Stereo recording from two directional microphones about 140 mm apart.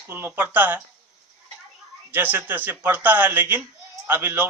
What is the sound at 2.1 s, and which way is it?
Speech, 15° right (ahead or behind).